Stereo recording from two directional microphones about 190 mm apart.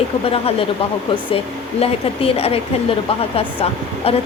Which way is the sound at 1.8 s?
30° left (ahead or behind).